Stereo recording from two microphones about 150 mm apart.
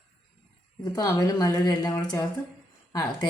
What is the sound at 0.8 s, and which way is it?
Speech, 25° left (ahead or behind).